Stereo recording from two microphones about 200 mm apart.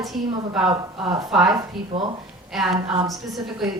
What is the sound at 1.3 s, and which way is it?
A woman's voice, centre (ahead or behind).